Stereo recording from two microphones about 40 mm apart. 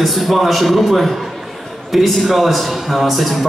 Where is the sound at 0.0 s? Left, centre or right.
Centre.